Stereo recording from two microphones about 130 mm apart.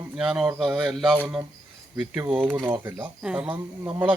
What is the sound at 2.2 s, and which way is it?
Speech, 15° right (ahead or behind).